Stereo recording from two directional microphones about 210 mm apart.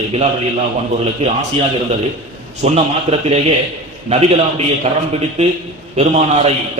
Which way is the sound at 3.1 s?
30° right (ahead or behind).